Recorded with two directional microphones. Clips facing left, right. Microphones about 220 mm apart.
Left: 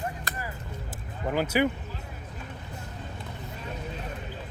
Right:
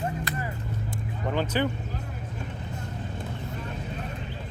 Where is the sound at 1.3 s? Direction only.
10° left (ahead or behind).